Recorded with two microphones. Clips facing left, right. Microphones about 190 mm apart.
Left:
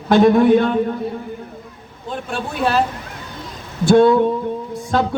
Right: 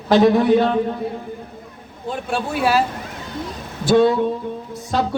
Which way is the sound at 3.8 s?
50° left (ahead or behind).